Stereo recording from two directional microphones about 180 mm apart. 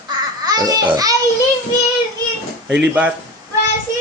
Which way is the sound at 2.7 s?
5° right (ahead or behind).